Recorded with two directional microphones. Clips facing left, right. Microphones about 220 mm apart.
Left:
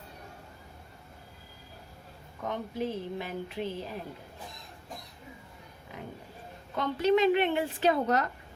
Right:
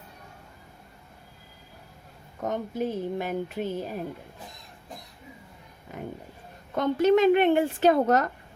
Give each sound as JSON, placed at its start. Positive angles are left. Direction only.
{"t": 2.4, "sound": "speech", "side_deg": -45}
{"t": 6.7, "sound": "speech", "side_deg": -50}